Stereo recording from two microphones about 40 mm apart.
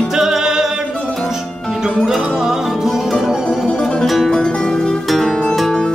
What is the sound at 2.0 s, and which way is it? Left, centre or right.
Music, centre.